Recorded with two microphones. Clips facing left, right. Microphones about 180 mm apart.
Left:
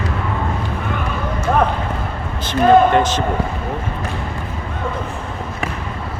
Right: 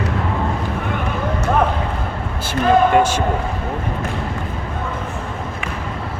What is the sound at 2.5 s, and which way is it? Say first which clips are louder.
Speech: left 2 dB; 10° right (ahead or behind).